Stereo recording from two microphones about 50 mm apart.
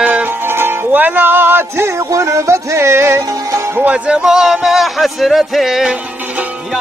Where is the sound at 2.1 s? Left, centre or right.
Right.